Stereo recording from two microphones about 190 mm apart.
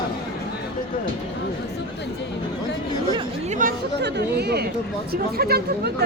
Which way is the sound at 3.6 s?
55° right (ahead or behind).